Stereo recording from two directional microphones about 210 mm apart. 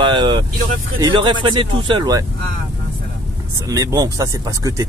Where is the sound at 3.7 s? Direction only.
15° right (ahead or behind).